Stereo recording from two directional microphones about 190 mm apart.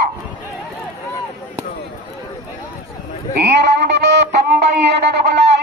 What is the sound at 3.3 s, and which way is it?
Music, 60° right (ahead or behind).